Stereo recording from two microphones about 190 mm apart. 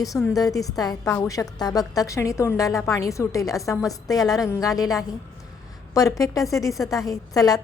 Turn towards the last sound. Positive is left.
turn(degrees=20)  # may be behind; listen again after turning